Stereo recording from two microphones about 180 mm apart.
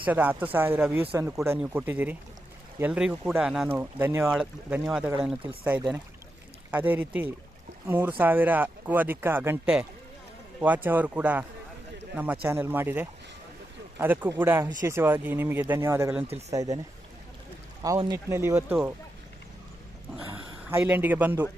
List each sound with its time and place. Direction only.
0.0 s speech: 10° right (ahead or behind)
4.3 s speech: 5° right (ahead or behind)
6.7 s speech: 10° right (ahead or behind)
17.8 s speech: 20° right (ahead or behind)
20.7 s speech: 10° right (ahead or behind)